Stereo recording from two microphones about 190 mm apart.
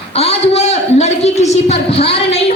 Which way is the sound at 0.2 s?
35° left (ahead or behind).